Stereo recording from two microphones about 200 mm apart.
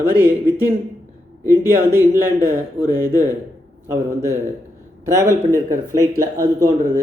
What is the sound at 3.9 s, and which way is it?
Speech, 15° right (ahead or behind).